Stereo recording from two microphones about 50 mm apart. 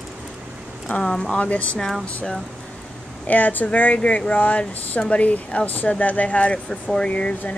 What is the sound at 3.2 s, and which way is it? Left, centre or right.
A woman's voice, left.